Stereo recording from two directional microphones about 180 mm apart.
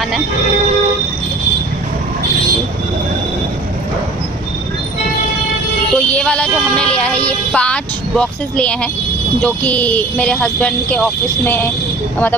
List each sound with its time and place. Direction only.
6.0 s speech: 5° left (ahead or behind)